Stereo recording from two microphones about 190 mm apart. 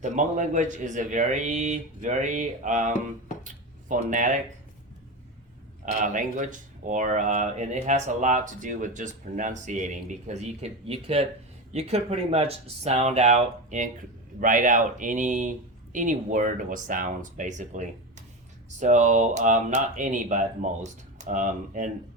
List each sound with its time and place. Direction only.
0.0 s speech: 40° right (ahead or behind)
3.4 s a sound: 40° right (ahead or behind)
5.8 s speech: 40° right (ahead or behind)